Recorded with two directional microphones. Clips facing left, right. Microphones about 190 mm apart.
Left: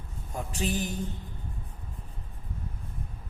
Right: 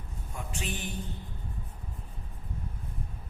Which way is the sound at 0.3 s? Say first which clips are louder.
Left 7 dB; 40° left (ahead or behind).